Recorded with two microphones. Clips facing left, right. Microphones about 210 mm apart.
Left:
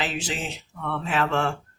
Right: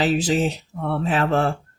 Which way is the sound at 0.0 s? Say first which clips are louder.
Right 10 dB; 40° right (ahead or behind).